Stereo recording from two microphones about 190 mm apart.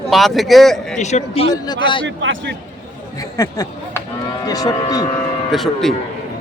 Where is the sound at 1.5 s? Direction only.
20° left (ahead or behind).